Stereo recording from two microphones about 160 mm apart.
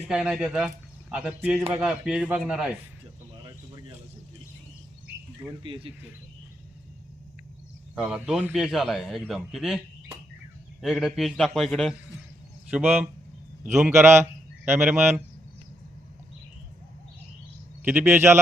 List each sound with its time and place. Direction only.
0.0 s a man's voice: 5° right (ahead or behind)
5.5 s speech: 30° right (ahead or behind)
7.9 s a man's voice: 5° right (ahead or behind)
17.8 s a man's voice: 15° right (ahead or behind)